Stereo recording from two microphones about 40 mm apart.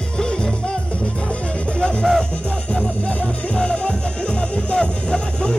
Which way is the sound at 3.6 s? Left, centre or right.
Left.